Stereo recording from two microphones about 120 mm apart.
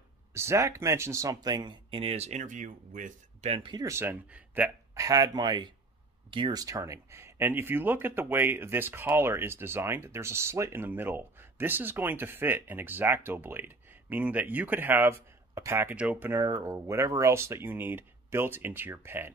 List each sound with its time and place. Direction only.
0.3 s speech: 20° right (ahead or behind); by 3.5 s 90° right
3.5 s speech: 45° right (ahead or behind)
3.8 s speech: 20° right (ahead or behind)
4.9 s speech: 30° right (ahead or behind); by 6.6 s 45° right (ahead or behind)
6.6 s speech: 30° right (ahead or behind)
16.4 s speech: 30° right (ahead or behind)